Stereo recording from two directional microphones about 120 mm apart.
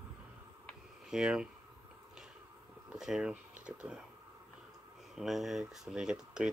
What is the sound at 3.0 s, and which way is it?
Speech, 5° right (ahead or behind).